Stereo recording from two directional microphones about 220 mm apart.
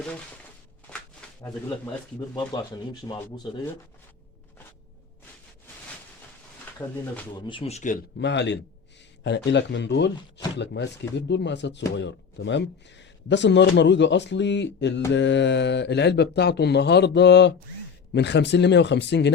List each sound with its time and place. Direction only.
0.9 s walk: 5° left (ahead or behind)
1.4 s speech: 15° left (ahead or behind)
6.7 s speech: 10° left (ahead or behind)
7.4 s speech: 25° left (ahead or behind)
8.2 s speech: 55° left (ahead or behind)